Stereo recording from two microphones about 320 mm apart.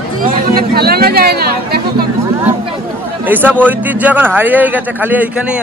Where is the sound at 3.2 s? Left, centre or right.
Centre.